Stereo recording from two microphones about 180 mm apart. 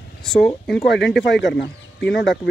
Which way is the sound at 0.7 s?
70° left (ahead or behind).